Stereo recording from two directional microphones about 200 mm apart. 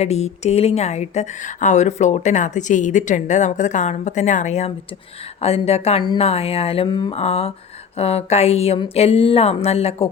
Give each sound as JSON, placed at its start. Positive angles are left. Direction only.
{"t": 0.0, "sound": "a woman's voice", "side_deg": 35}